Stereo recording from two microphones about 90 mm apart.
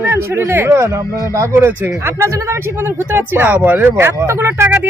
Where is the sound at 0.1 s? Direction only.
25° right (ahead or behind).